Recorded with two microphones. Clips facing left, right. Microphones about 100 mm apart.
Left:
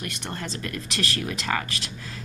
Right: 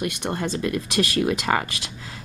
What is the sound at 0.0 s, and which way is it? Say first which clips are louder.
Speech: right 8 dB; 20° right (ahead or behind).